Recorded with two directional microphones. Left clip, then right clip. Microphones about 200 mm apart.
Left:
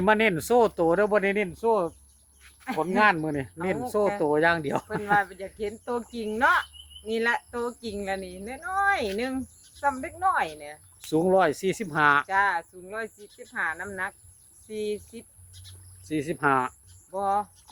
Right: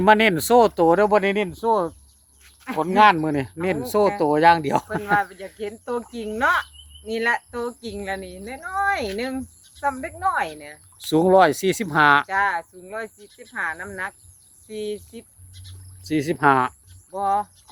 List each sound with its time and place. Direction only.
0.0 s speech: 40° right (ahead or behind)
5.0 s speech: centre (ahead or behind)
10.9 s speech: 45° right (ahead or behind)
12.3 s speech: centre (ahead or behind)
16.0 s speech: 45° right (ahead or behind)
17.1 s speech: 5° left (ahead or behind)